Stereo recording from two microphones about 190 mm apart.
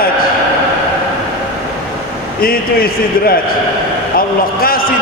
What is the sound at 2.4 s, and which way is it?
Speech, 50° left (ahead or behind).